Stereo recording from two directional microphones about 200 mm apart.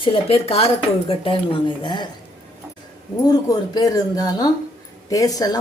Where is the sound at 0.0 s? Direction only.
30° left (ahead or behind).